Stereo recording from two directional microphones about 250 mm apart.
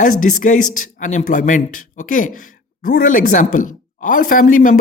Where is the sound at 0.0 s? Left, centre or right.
Left.